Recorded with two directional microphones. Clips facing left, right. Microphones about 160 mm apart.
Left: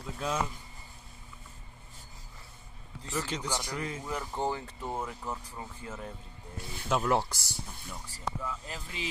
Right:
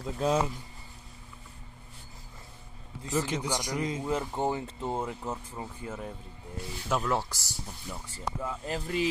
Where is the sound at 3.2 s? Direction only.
10° right (ahead or behind).